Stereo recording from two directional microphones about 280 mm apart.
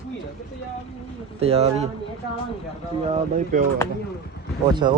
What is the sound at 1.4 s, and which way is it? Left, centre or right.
Speech, right.